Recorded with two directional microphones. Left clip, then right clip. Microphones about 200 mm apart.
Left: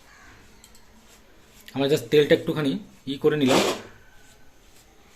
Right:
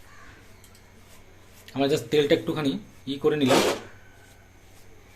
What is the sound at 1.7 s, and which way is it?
Speech, 10° left (ahead or behind).